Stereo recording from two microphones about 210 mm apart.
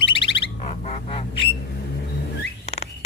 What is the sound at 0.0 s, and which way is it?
Bird, 25° left (ahead or behind).